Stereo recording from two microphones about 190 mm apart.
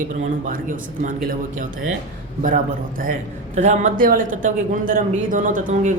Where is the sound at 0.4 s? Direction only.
45° right (ahead or behind).